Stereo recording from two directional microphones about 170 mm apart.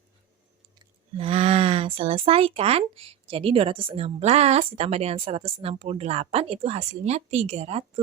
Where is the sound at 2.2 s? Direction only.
35° right (ahead or behind).